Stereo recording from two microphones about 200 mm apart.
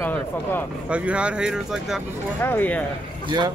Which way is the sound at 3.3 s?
20° right (ahead or behind).